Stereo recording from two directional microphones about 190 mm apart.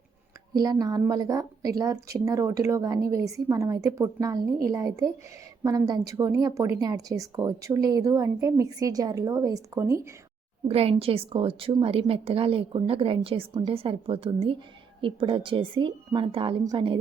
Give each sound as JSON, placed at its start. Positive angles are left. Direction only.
{"t": 0.5, "sound": "a woman's voice", "side_deg": -20}
{"t": 10.7, "sound": "a woman's voice", "side_deg": -30}